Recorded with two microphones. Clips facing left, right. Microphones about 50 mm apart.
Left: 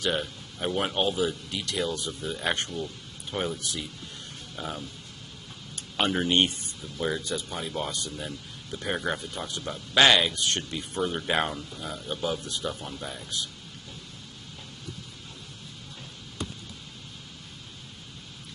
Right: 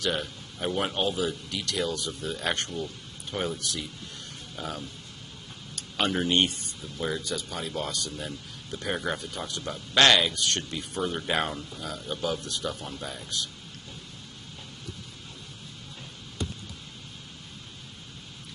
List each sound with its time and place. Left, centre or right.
0.0 s speech: centre
2.2 s a man's voice: centre
5.9 s a man's voice: centre
10.6 s a man's voice: centre